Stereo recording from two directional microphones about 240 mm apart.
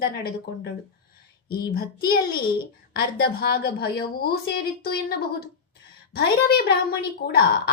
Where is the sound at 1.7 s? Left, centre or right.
Left.